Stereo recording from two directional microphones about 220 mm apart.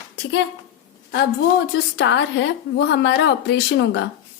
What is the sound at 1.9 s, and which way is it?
A woman's voice, 55° left (ahead or behind).